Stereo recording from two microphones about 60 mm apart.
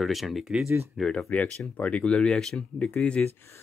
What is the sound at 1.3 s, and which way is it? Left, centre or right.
Speech, left.